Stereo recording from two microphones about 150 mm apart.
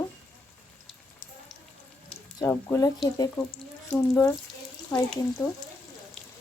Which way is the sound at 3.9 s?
20° left (ahead or behind).